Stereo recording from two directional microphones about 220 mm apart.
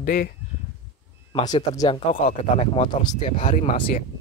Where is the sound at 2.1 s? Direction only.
35° left (ahead or behind).